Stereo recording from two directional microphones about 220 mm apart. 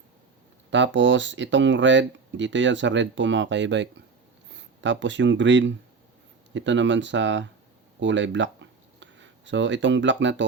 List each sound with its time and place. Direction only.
0.7 s speech: 55° right (ahead or behind)